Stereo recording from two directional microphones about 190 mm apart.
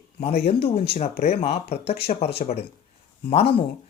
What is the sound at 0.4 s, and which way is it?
Speech, 30° left (ahead or behind).